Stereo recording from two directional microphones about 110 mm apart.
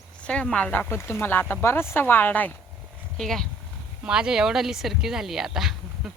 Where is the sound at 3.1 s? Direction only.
5° left (ahead or behind).